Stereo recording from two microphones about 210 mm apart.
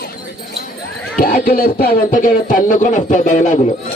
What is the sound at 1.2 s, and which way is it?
Speech, 45° left (ahead or behind).